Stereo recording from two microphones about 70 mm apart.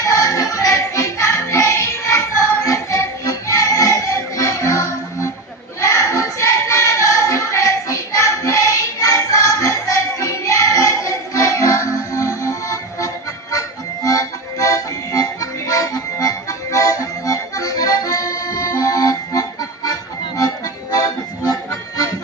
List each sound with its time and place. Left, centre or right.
0.0 s music: left
5.8 s child singing: left
13.5 s music: left